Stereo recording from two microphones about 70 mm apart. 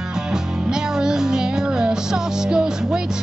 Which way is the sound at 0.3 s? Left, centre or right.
Centre.